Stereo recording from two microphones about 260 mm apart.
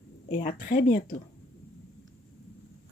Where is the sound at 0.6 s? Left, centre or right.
Left.